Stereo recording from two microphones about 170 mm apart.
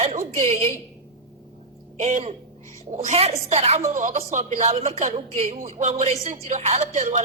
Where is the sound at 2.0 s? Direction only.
45° right (ahead or behind).